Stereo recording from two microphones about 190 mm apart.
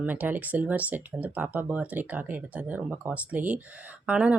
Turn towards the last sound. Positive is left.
turn(degrees=-5)  # may be behind; listen again after turning